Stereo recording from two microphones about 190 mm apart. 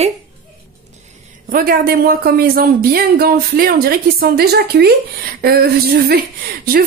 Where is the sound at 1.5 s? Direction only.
50° right (ahead or behind).